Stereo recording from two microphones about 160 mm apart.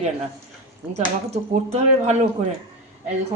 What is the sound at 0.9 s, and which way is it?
Speech, 45° right (ahead or behind).